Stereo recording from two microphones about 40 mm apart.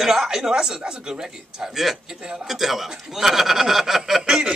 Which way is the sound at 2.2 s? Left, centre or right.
Centre.